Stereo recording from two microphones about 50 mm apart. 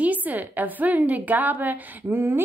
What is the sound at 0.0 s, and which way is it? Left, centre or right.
A woman's voice, right.